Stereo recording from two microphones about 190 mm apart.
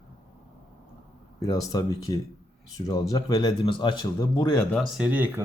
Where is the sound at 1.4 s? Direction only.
20° left (ahead or behind).